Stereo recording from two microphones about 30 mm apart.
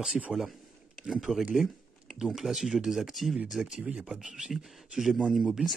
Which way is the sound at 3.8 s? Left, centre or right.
Right.